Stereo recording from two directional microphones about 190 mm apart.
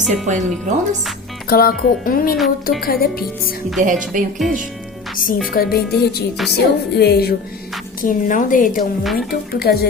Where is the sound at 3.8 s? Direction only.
45° right (ahead or behind).